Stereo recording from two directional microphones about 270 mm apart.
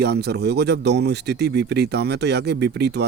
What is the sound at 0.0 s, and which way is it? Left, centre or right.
Speech, right.